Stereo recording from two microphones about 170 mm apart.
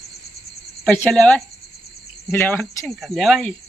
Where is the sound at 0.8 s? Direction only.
Centre (ahead or behind).